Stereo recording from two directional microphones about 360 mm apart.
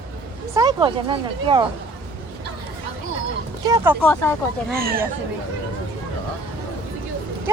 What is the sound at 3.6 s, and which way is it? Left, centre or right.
Speech, centre.